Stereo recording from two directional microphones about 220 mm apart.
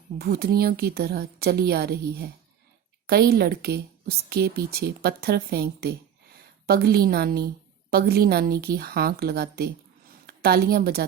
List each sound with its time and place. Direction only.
0.2 s a woman's voice: 45° right (ahead or behind)